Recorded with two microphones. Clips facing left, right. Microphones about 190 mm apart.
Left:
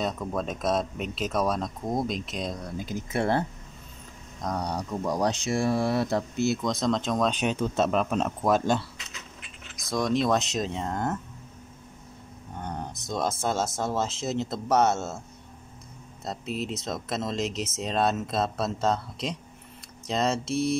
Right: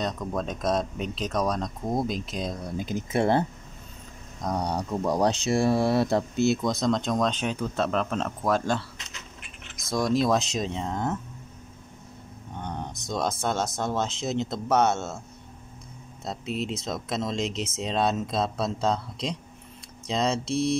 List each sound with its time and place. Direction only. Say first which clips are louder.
0.0 s speech: even; 5° left (ahead or behind)
2.8 s speech: right 3 dB; 20° right (ahead or behind)
4.4 s speech: right 2 dB; centre (ahead or behind)
4.7 s speech: right 3 dB; 30° right (ahead or behind)
6.6 s speech: right 1 dB; centre (ahead or behind)
7.3 s speech: left 2 dB; 20° left (ahead or behind)
9.8 s speech: right 1 dB; centre (ahead or behind)
12.5 s speech: even; 5° left (ahead or behind)
16.3 s speech: right 1 dB; centre (ahead or behind)